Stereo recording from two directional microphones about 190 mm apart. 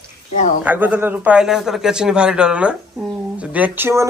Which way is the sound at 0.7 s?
10° right (ahead or behind).